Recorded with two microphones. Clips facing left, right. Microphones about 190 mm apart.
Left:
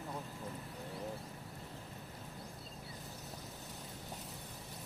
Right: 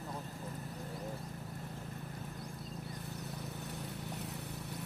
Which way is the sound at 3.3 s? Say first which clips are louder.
Right 6 dB; 65° right (ahead or behind).